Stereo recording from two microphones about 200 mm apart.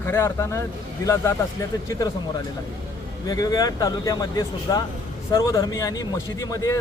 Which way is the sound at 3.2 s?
15° left (ahead or behind).